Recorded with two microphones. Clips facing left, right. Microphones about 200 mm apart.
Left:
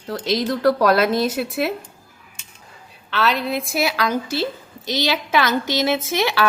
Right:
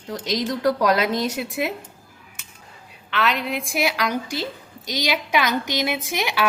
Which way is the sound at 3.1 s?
35° left (ahead or behind).